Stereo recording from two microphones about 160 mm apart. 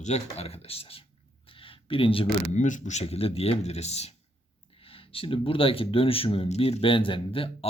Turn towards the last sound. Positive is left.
turn(degrees=35)  # may be behind; listen again after turning